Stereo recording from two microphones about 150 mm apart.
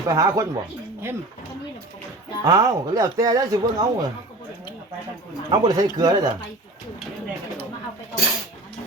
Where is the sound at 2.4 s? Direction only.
25° right (ahead or behind).